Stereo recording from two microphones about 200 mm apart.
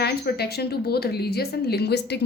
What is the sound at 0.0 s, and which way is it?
A woman's voice, 55° left (ahead or behind).